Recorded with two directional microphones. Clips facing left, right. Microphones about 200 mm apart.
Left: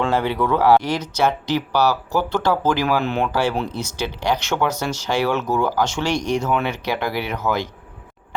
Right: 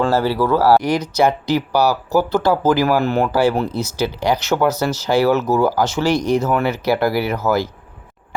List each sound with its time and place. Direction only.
0.0 s speech: 5° right (ahead or behind)